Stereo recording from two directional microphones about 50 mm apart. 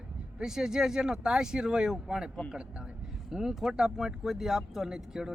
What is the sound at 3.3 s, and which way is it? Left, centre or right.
Speech, centre.